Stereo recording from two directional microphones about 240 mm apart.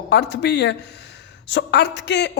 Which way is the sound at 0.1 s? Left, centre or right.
Left.